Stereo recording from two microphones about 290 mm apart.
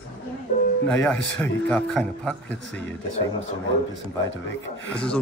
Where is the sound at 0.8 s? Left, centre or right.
Centre.